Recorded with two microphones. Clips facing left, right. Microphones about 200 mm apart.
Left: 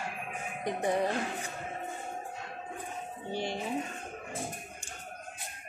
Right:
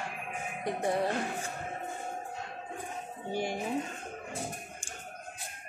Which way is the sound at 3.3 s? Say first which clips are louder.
Right 2 dB; 10° right (ahead or behind).